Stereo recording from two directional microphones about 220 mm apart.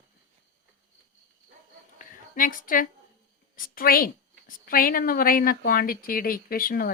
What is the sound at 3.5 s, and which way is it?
A woman's voice, 40° left (ahead or behind).